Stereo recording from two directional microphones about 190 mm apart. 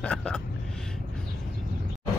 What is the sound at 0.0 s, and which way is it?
Speech, 5° left (ahead or behind).